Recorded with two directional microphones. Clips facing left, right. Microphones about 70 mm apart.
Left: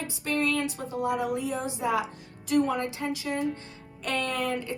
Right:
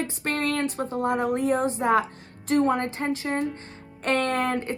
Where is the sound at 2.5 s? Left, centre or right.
Right.